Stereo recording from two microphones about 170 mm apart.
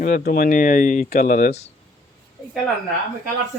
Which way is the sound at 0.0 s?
50° left (ahead or behind).